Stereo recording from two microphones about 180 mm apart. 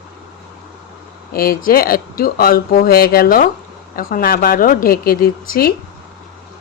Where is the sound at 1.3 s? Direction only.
55° left (ahead or behind).